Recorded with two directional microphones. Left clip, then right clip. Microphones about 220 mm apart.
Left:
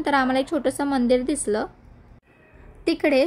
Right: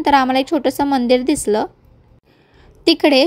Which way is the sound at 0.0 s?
30° right (ahead or behind).